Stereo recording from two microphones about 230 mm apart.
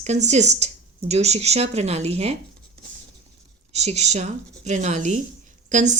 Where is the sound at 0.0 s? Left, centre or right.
Right.